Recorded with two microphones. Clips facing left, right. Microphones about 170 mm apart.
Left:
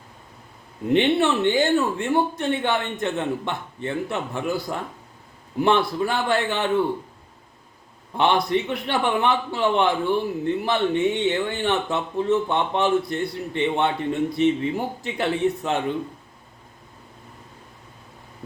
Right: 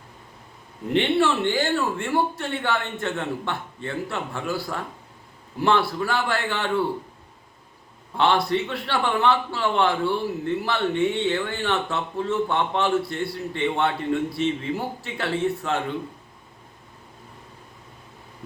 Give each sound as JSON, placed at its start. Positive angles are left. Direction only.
{"t": 0.9, "sound": "a man's voice", "side_deg": 20}
{"t": 8.1, "sound": "a man's voice", "side_deg": 20}